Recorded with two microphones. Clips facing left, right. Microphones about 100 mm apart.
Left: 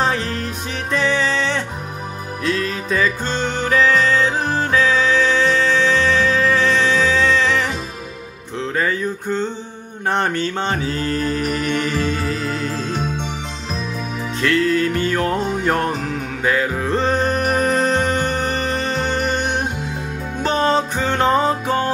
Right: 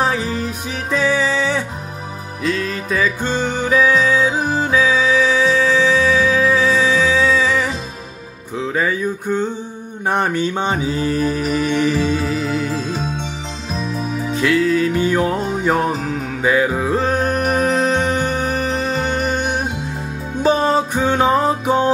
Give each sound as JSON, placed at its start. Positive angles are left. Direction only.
{"t": 0.0, "sound": "music", "side_deg": -5}
{"t": 3.2, "sound": "music", "side_deg": -10}
{"t": 8.5, "sound": "a sound", "side_deg": -5}
{"t": 10.0, "sound": "mantra", "side_deg": -10}
{"t": 14.3, "sound": "music", "side_deg": -5}
{"t": 16.5, "sound": "music", "side_deg": -10}